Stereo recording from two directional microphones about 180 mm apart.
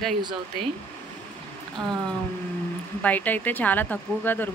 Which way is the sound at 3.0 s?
10° left (ahead or behind).